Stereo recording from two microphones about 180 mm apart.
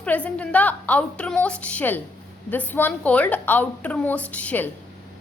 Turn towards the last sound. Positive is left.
turn(degrees=10)  # may be behind; listen again after turning